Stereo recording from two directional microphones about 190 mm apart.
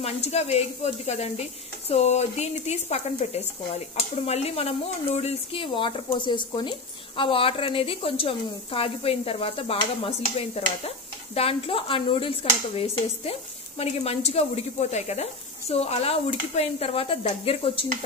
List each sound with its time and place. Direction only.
0.0 s a woman's voice: 35° left (ahead or behind)